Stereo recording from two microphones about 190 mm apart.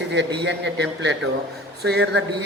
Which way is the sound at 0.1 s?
65° right (ahead or behind).